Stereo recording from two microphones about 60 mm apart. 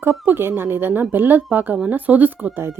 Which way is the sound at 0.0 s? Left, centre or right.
Right.